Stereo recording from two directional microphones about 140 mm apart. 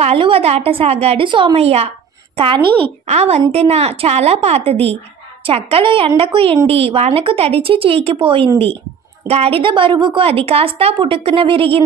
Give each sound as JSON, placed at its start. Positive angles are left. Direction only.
{"t": 0.0, "sound": "a woman's voice", "side_deg": -45}
{"t": 3.1, "sound": "a woman's voice", "side_deg": -50}